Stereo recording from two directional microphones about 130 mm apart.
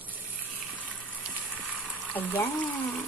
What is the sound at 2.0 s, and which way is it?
Speech, 15° left (ahead or behind).